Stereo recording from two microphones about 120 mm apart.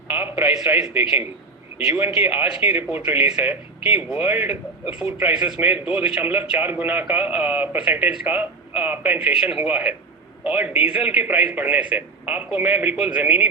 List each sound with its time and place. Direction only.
0.2 s a man's voice: 15° right (ahead or behind)
2.1 s a man's voice: 55° left (ahead or behind)
2.6 s a man's voice: 15° right (ahead or behind)